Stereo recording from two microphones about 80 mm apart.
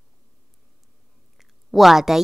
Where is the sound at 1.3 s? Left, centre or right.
Centre.